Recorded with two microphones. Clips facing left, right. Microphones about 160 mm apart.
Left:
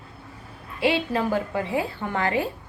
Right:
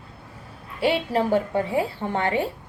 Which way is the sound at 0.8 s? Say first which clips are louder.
Right 1 dB; 30° right (ahead or behind).